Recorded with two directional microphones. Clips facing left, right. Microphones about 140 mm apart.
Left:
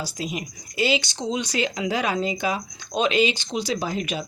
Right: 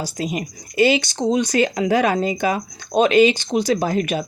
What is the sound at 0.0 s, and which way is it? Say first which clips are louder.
Speech: right 5 dB; 45° right (ahead or behind).